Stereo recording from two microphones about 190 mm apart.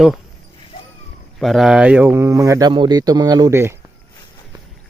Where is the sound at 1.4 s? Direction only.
Centre (ahead or behind).